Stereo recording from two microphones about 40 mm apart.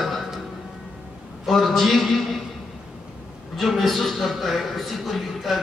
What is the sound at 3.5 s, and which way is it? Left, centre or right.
A man's voice, centre.